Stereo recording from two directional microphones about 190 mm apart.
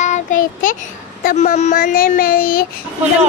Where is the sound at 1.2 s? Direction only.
45° left (ahead or behind).